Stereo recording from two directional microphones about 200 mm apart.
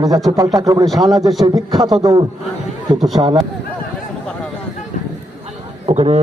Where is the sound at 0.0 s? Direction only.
20° right (ahead or behind).